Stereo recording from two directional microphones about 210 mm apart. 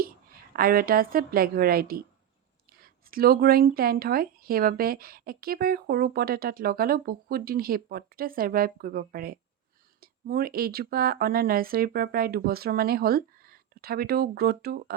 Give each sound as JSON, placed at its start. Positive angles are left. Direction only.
{"t": 0.5, "sound": "speech", "side_deg": -45}